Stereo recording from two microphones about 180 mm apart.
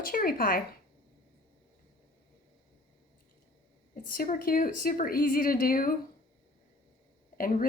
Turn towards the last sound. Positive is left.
turn(degrees=50)  # may be behind; listen again after turning